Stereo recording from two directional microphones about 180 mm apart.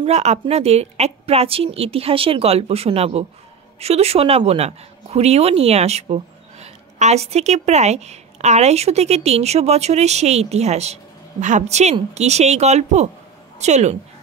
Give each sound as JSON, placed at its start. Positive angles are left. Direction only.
{"t": 0.0, "sound": "a woman's voice", "side_deg": -35}